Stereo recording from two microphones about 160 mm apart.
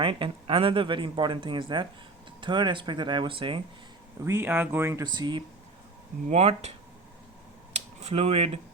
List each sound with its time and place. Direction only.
0.0 s speech: 35° right (ahead or behind)
4.2 s speech: 15° right (ahead or behind)
5.0 s speech: 25° right (ahead or behind)
6.2 s speech: 40° right (ahead or behind)
8.0 s speech: 40° right (ahead or behind)